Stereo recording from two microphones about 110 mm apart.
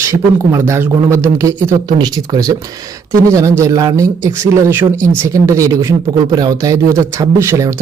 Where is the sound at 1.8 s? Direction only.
40° right (ahead or behind).